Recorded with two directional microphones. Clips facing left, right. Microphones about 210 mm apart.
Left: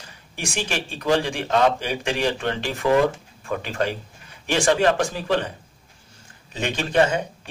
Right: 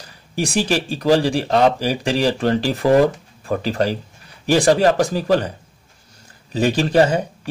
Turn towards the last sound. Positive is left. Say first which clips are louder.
# right 5 dB
turn(degrees=-35)  # may be behind; listen again after turning